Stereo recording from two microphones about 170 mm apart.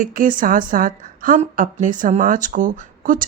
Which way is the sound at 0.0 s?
50° right (ahead or behind).